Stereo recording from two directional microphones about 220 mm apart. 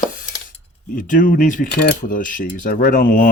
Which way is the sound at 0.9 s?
40° left (ahead or behind).